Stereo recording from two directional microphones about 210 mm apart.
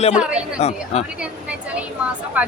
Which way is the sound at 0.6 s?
30° left (ahead or behind).